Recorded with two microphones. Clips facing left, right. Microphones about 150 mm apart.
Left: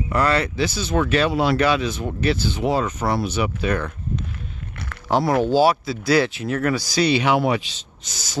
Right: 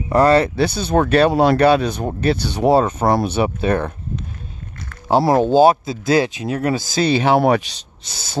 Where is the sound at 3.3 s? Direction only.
30° right (ahead or behind).